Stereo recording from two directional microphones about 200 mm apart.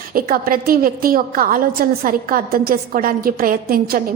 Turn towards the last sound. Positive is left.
turn(degrees=-45)  # may be behind; listen again after turning